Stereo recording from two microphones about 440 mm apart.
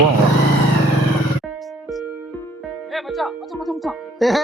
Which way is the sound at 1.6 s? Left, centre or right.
Centre.